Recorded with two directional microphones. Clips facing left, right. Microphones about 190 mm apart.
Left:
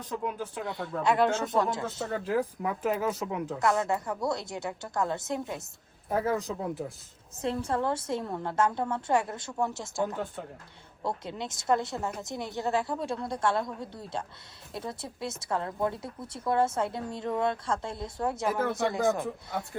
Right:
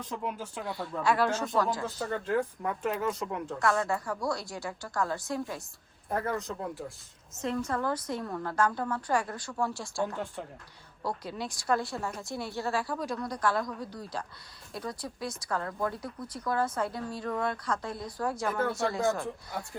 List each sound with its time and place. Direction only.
0.1 s speech: centre (ahead or behind)
1.0 s speech: 20° left (ahead or behind)
2.0 s speech: centre (ahead or behind)
3.6 s speech: 20° left (ahead or behind)
6.1 s speech: 5° left (ahead or behind)
7.3 s speech: 30° left (ahead or behind)
18.6 s speech: centre (ahead or behind)